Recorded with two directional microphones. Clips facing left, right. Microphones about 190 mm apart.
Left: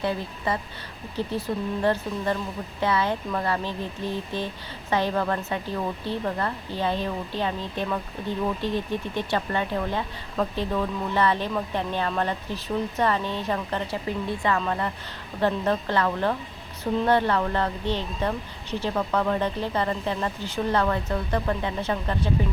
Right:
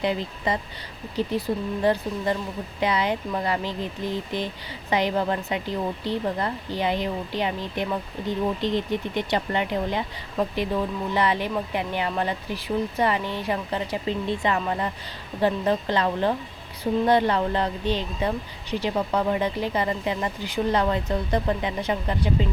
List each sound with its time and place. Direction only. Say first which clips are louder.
0.0 s speech: right 2 dB; 15° right (ahead or behind)
1.8 s speech: right 2 dB; 15° right (ahead or behind)